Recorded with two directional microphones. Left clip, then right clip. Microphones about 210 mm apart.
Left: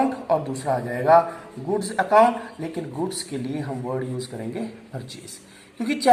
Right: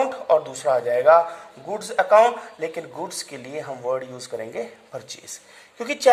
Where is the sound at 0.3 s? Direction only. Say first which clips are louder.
Right 4 dB; 45° right (ahead or behind).